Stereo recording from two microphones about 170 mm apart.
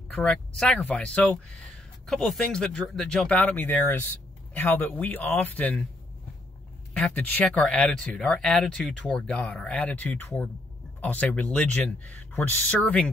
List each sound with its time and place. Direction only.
0.1 s speech: 5° left (ahead or behind)
6.9 s speech: 10° left (ahead or behind)